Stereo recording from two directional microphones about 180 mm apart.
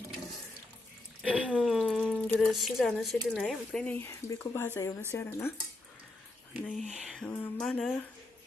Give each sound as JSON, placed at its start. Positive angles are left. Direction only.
{"t": 1.4, "sound": "speech", "side_deg": -5}
{"t": 6.5, "sound": "speech", "side_deg": 0}
{"t": 7.3, "sound": "a sound", "side_deg": 10}